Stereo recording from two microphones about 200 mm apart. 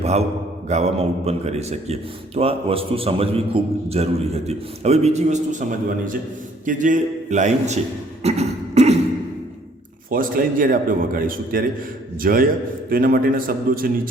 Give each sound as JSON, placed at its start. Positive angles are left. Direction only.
{"t": 0.0, "sound": "mantra", "side_deg": -30}
{"t": 0.7, "sound": "a man's voice", "side_deg": -35}
{"t": 8.2, "sound": "beatboxing", "side_deg": -30}
{"t": 10.1, "sound": "a man's voice", "side_deg": -45}